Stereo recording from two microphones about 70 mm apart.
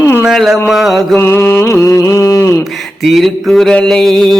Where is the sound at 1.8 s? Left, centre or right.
Left.